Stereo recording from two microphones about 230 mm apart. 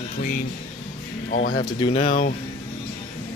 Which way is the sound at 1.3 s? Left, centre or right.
Left.